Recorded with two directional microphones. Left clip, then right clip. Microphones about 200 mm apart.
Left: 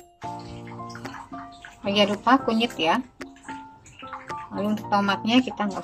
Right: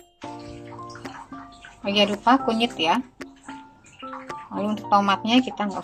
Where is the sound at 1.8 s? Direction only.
10° right (ahead or behind).